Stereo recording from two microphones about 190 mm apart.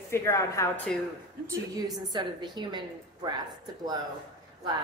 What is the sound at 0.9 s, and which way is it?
Speech, 5° left (ahead or behind).